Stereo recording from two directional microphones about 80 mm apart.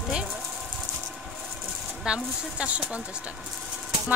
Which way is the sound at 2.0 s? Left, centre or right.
Centre.